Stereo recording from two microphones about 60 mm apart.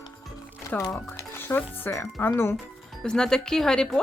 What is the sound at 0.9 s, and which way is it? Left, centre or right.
Speech, left.